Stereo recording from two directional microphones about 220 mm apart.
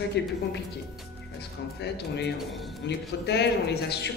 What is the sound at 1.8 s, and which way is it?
A man's voice, 50° left (ahead or behind).